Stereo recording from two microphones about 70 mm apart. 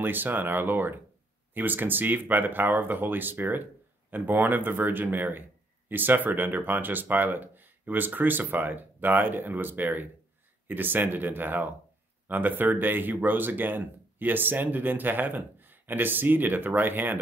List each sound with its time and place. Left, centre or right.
0.0 s speech: right